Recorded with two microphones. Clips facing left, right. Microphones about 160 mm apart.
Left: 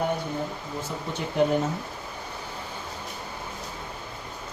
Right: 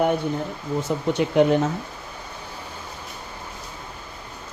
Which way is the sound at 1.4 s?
80° right.